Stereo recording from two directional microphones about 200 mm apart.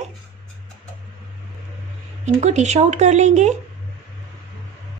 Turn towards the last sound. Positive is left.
turn(degrees=-35)  # may be behind; listen again after turning